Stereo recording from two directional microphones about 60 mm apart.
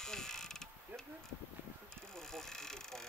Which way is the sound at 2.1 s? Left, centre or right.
Centre.